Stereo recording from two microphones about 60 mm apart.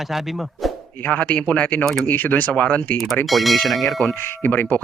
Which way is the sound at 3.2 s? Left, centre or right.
Centre.